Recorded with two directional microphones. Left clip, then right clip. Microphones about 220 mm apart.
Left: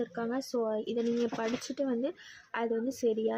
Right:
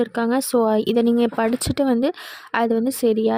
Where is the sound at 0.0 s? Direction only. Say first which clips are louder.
Right 13 dB; 45° right (ahead or behind).